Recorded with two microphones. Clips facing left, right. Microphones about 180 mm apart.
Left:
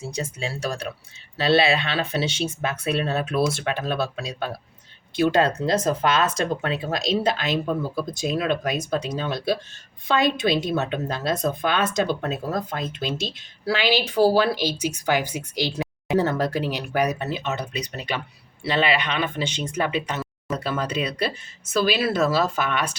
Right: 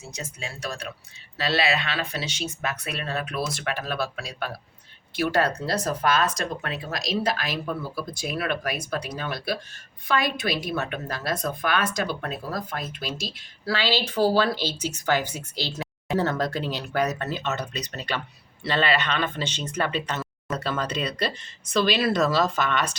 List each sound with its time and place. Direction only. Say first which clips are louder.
0.0 s a woman's voice: left 7 dB; 30° left (ahead or behind); by 23.0 s 10° left (ahead or behind)